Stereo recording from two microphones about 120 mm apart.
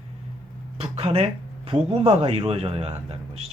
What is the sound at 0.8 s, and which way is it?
Speech, 55° right (ahead or behind).